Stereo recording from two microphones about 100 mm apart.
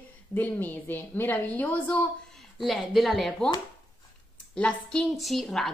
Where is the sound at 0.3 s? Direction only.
15° left (ahead or behind).